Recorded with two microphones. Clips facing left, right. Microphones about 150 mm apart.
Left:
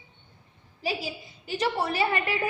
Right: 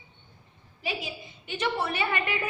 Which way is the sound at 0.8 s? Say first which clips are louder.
Left 3 dB; 35° left (ahead or behind).